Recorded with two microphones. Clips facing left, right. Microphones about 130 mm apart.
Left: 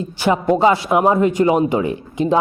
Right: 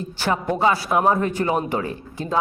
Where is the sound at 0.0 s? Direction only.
15° left (ahead or behind).